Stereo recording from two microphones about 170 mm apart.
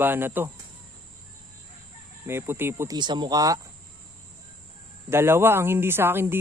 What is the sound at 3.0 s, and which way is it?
Speech, 25° right (ahead or behind).